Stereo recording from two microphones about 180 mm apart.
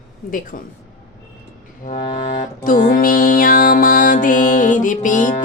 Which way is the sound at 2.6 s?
50° left (ahead or behind).